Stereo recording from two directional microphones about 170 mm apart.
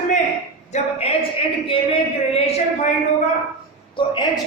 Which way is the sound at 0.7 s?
35° left (ahead or behind).